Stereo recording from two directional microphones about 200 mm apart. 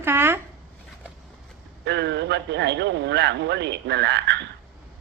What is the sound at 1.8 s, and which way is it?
A man's voice, 60° right (ahead or behind).